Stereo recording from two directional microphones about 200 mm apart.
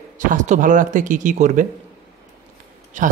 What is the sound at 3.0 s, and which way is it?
Speech, 40° right (ahead or behind).